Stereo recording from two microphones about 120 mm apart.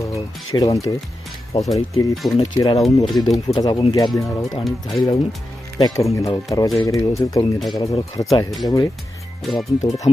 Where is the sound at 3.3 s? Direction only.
30° left (ahead or behind).